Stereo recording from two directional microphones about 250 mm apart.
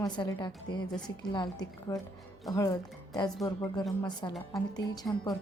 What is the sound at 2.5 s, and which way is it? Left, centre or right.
Speech, centre.